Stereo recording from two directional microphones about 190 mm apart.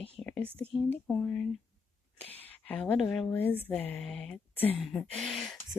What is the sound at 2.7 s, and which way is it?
Speech, 5° left (ahead or behind).